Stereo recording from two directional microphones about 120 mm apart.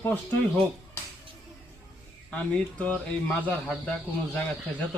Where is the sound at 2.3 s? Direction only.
10° left (ahead or behind).